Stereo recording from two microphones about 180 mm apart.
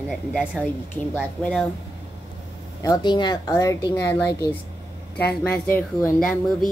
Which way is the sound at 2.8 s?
20° left (ahead or behind).